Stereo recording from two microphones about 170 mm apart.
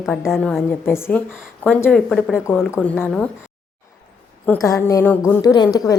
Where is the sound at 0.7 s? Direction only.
15° left (ahead or behind).